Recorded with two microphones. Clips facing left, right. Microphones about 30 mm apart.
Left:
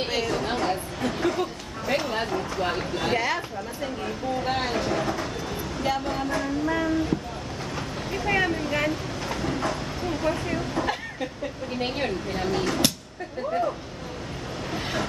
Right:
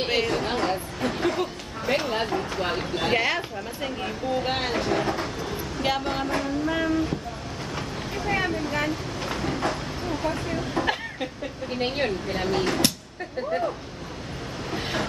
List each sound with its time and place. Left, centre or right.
0.0 s speech: centre
3.1 s speech: right
4.6 s speech: centre
5.8 s speech: right
6.4 s vehicle: centre
8.4 s speech: centre
9.2 s train: centre
10.6 s speech: centre
14.7 s vehicle: centre